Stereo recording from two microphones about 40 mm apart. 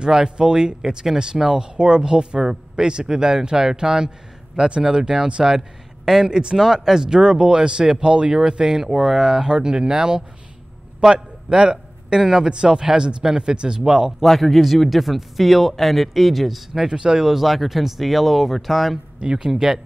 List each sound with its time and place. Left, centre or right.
0.0 s a man's voice: centre
14.2 s a man's voice: centre
16.9 s a man's voice: centre
19.1 s speech: right